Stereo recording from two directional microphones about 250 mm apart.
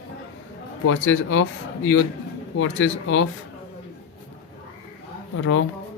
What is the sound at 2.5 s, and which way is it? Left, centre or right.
Speech, left.